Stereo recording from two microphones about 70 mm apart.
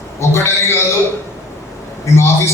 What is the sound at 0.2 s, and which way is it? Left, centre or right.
Speech, left.